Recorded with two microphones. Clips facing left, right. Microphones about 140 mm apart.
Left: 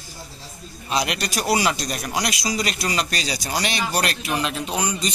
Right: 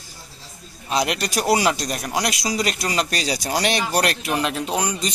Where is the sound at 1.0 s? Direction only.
45° right (ahead or behind).